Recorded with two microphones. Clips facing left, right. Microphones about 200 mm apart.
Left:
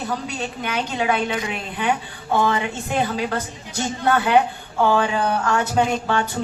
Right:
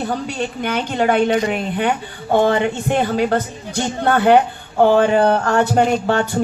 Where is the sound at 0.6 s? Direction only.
50° right (ahead or behind).